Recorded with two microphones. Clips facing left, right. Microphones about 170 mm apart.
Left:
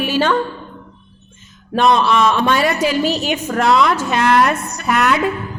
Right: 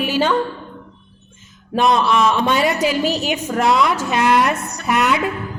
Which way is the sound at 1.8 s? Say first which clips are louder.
Left 2 dB; 15° right (ahead or behind).